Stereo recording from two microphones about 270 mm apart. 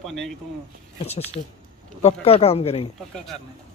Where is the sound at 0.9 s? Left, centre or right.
Left.